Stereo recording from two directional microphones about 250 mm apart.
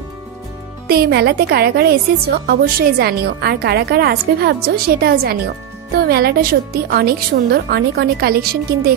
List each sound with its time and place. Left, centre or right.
0.8 s a woman's voice: right